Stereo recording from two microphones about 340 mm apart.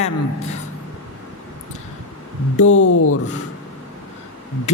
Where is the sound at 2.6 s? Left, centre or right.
Left.